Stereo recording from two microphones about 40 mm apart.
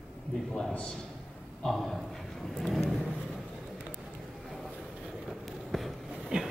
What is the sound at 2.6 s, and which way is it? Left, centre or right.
Speech, centre.